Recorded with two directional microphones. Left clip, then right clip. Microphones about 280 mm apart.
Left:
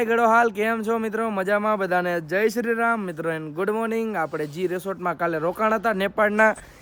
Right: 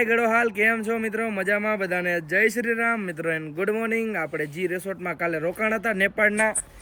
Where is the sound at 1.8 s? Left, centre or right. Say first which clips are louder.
Left 2 dB; left.